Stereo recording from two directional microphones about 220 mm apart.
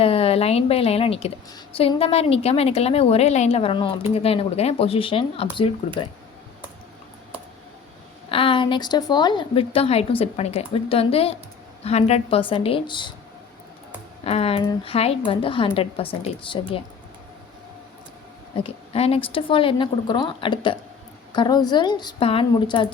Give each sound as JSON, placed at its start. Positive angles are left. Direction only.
{"t": 0.0, "sound": "a woman's voice", "side_deg": 25}
{"t": 8.3, "sound": "a woman's voice", "side_deg": 25}
{"t": 14.3, "sound": "a woman's voice", "side_deg": 25}
{"t": 18.5, "sound": "a woman's voice", "side_deg": 25}